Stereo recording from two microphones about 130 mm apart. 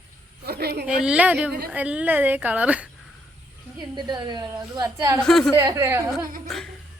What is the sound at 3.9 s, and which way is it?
A woman's voice, 35° right (ahead or behind).